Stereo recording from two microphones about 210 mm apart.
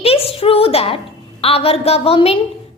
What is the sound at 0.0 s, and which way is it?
A woman's voice, 30° left (ahead or behind).